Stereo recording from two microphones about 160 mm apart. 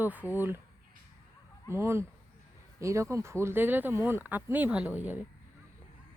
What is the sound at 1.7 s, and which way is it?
Speech, 15° right (ahead or behind).